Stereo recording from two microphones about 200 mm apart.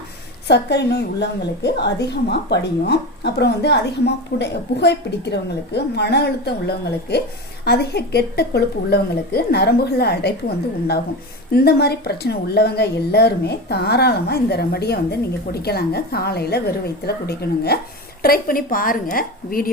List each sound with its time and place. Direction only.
0.4 s a woman's voice: 60° left (ahead or behind)
11.5 s a woman's voice: 50° left (ahead or behind)